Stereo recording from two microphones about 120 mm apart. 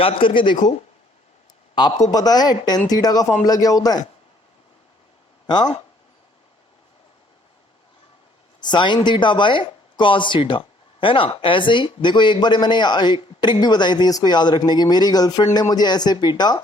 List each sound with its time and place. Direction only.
0.0 s speech: 50° left (ahead or behind)
1.7 s a man's voice: 35° left (ahead or behind)
5.5 s speech: 35° left (ahead or behind)
8.6 s speech: 40° left (ahead or behind)